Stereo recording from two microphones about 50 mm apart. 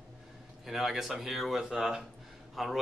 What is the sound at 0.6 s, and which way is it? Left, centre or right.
Speech, centre.